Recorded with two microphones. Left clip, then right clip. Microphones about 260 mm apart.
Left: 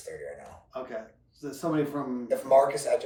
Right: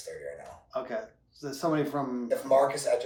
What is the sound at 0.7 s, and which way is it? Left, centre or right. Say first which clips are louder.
Speech: right 3 dB; right.